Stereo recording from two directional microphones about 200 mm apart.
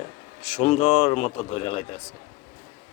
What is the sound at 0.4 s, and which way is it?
Speech, 35° left (ahead or behind).